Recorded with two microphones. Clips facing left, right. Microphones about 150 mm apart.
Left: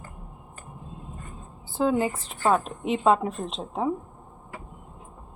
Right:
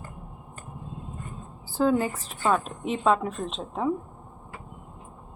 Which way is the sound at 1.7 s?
20° left (ahead or behind).